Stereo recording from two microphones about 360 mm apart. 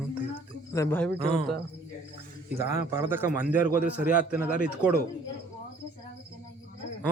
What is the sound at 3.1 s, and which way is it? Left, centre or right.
Speech, centre.